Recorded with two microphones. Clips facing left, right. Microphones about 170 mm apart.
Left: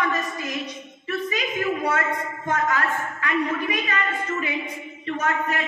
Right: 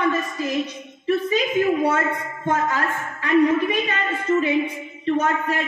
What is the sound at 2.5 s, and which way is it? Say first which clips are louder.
A woman's voice: right 2 dB; 30° right (ahead or behind).